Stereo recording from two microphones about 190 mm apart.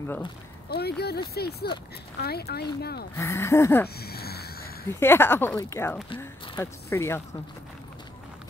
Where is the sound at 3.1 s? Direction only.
15° left (ahead or behind).